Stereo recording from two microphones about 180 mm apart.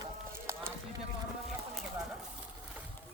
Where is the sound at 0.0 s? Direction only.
15° right (ahead or behind).